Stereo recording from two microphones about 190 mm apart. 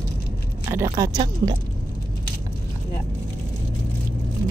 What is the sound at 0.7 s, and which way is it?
Speech, 15° right (ahead or behind).